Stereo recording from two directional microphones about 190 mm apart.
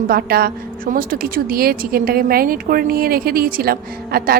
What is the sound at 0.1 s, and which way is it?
Speech, 55° right (ahead or behind).